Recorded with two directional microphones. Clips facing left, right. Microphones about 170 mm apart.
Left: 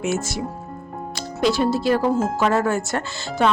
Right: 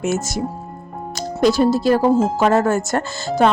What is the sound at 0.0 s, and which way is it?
A woman's voice, 45° right (ahead or behind).